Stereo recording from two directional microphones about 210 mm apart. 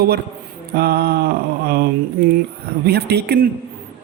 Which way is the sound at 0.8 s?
50° right (ahead or behind).